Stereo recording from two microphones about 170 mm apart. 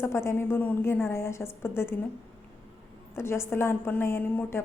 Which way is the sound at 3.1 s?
15° left (ahead or behind).